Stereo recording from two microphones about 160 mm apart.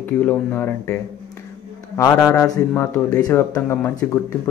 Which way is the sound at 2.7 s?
20° left (ahead or behind).